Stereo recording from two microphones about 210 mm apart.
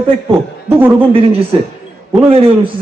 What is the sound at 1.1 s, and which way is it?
Speech, 25° right (ahead or behind).